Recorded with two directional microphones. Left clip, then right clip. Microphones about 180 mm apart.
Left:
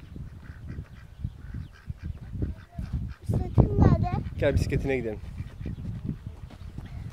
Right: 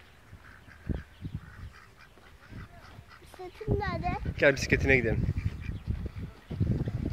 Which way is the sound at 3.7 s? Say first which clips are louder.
Even; 50° left (ahead or behind).